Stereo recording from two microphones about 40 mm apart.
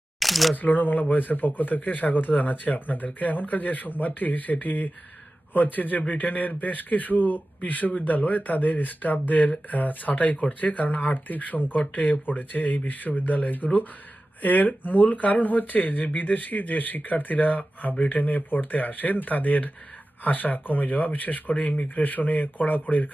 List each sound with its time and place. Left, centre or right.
0.2 s camera: centre
0.5 s a man's voice: left